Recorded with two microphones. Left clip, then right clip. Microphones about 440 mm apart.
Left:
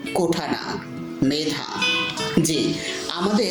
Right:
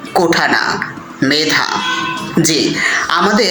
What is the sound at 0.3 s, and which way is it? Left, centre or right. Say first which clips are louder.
Music: right 12 dB; left.